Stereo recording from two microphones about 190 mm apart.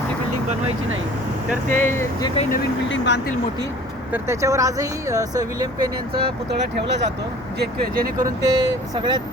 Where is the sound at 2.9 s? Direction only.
70° left (ahead or behind).